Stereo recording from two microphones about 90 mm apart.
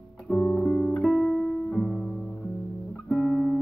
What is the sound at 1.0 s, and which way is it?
Music, 5° right (ahead or behind).